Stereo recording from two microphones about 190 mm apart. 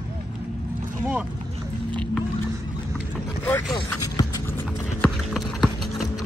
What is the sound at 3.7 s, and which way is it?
Speech, 20° left (ahead or behind).